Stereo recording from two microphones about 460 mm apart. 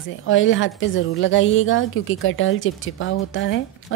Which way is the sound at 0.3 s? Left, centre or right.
Left.